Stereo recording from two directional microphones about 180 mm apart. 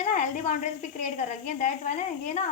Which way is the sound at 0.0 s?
45° left (ahead or behind).